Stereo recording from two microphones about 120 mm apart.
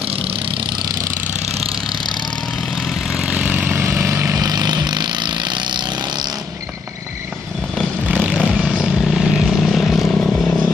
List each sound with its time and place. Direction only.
3.1 s vehicle: 10° right (ahead or behind); by 5.8 s 40° right (ahead or behind)
8.1 s vehicle: 10° right (ahead or behind); by 10.7 s 5° left (ahead or behind)